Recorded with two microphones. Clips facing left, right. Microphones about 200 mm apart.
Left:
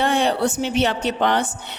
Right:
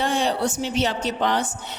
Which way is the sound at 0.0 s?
60° left (ahead or behind).